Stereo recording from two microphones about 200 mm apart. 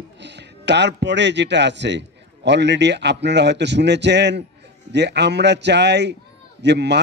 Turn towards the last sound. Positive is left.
turn(degrees=-60)  # may be behind; listen again after turning